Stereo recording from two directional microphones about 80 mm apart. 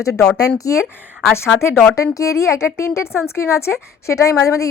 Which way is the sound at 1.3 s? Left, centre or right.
Left.